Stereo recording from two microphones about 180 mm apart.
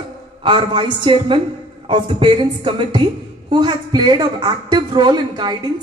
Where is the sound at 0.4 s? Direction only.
25° right (ahead or behind).